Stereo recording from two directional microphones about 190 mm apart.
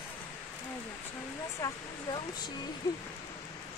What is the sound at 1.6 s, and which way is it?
Speech, 20° left (ahead or behind).